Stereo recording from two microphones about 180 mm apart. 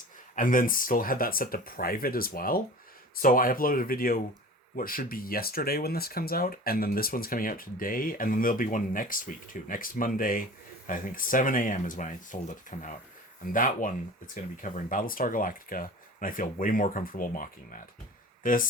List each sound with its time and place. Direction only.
0.3 s speech: 50° left (ahead or behind)